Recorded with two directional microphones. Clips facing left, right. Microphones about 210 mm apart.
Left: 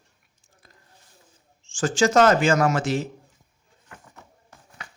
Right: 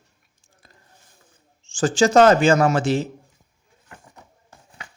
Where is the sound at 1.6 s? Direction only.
35° right (ahead or behind).